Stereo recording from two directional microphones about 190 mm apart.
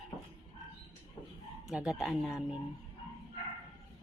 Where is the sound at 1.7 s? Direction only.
5° right (ahead or behind).